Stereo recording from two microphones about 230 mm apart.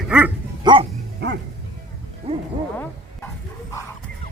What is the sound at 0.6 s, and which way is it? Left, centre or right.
Speech, right.